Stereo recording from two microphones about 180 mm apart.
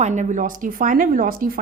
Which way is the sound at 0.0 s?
40° right (ahead or behind).